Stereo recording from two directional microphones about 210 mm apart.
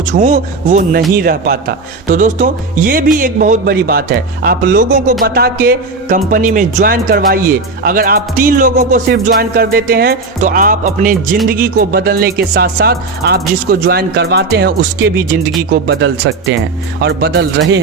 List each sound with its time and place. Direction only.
0.1 s music: 35° right (ahead or behind)
5.2 s speech: 45° right (ahead or behind)
7.8 s music: 45° right (ahead or behind)
11.4 s speech: 45° right (ahead or behind); by 16.6 s 60° right (ahead or behind)
17.0 s speech: 50° right (ahead or behind)